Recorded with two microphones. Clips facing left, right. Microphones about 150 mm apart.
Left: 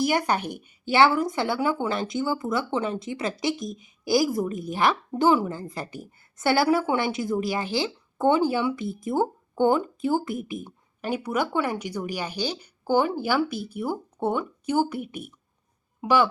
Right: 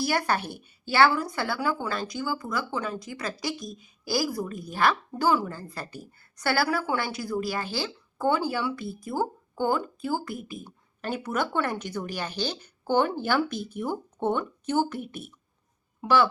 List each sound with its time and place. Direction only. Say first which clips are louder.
0.0 s a woman's voice: left 3 dB; 15° left (ahead or behind)